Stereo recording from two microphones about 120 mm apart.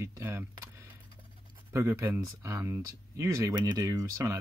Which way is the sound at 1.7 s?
20° right (ahead or behind).